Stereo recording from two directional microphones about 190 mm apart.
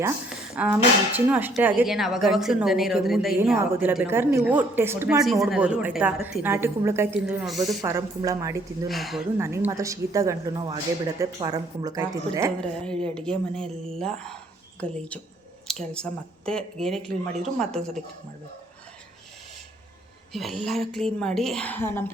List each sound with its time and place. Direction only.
0.3 s a woman's voice: 5° right (ahead or behind)
5.2 s a woman's voice: centre (ahead or behind)
7.8 s a woman's voice: 15° right (ahead or behind)
8.9 s speech: centre (ahead or behind)
9.4 s a woman's voice: 10° right (ahead or behind)
12.5 s speech: 5° left (ahead or behind)
20.3 s speech: centre (ahead or behind)